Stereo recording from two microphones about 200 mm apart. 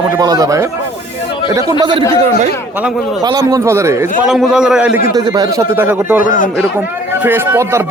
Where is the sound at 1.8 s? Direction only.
25° right (ahead or behind).